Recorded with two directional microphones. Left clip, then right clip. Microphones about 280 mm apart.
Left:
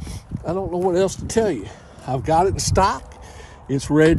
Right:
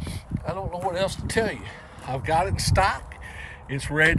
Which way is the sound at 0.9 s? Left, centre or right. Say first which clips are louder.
Left 3 dB; left.